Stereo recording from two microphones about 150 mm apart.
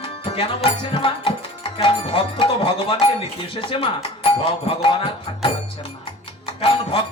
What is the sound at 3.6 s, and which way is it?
Speech, 35° left (ahead or behind).